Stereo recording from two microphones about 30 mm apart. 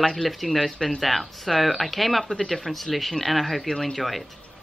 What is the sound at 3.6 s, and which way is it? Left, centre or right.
Speech, centre.